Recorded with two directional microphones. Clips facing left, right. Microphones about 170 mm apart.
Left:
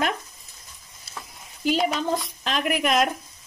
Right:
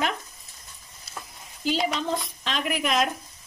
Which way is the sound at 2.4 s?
50° left (ahead or behind).